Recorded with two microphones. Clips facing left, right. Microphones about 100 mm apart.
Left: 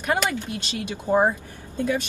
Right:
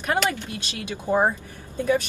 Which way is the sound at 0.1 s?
15° left (ahead or behind).